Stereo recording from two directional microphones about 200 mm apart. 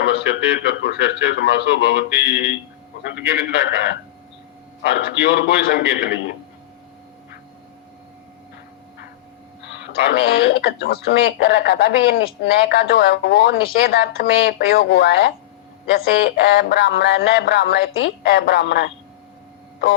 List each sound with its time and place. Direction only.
0.0 s a sound: 55° left (ahead or behind)
2.3 s speech: 5° right (ahead or behind)
3.2 s speech: 50° left (ahead or behind)
4.9 s speech: 50° left (ahead or behind)
9.6 s speech: 55° left (ahead or behind)
12.6 s a sound: 55° left (ahead or behind)